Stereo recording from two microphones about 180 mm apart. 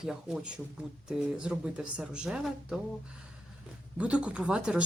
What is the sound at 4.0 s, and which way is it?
Speech, 5° right (ahead or behind).